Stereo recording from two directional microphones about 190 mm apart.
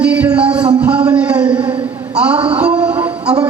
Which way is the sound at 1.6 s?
25° right (ahead or behind).